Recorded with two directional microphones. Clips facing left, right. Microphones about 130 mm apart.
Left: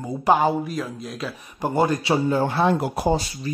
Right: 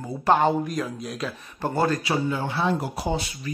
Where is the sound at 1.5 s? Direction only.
15° left (ahead or behind).